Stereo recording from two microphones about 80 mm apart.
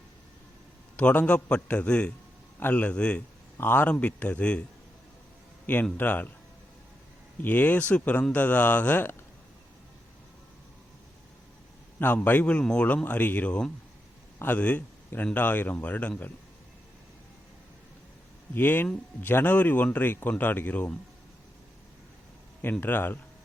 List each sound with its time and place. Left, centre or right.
0.9 s a man's voice: centre
6.0 s speech: left
7.4 s speech: left
11.9 s a man's voice: left
18.5 s speech: left
22.8 s speech: left